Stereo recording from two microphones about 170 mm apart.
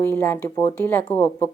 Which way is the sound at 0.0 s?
15° left (ahead or behind).